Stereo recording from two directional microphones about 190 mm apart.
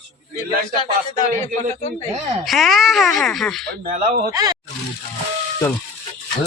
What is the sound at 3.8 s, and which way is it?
Speech, 45° right (ahead or behind).